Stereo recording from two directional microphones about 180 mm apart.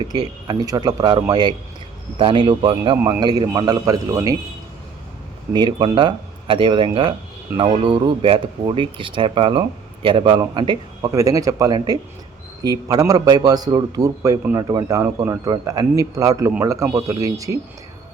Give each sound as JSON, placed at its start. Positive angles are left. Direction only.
{"t": 0.0, "sound": "a man's voice", "side_deg": -20}
{"t": 5.5, "sound": "a man's voice", "side_deg": -25}